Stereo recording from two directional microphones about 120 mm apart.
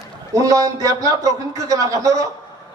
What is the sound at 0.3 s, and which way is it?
A man's voice, 30° right (ahead or behind).